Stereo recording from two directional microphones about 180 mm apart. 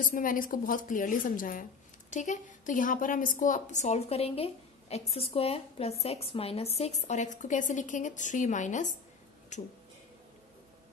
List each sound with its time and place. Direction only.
0.0 s a woman's voice: 50° left (ahead or behind)